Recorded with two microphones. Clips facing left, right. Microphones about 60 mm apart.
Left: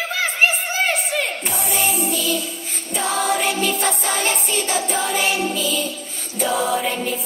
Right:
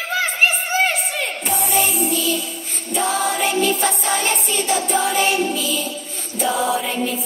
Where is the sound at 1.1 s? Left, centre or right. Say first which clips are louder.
Left 2 dB; left.